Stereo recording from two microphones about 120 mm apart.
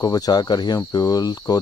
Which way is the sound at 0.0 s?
30° left (ahead or behind).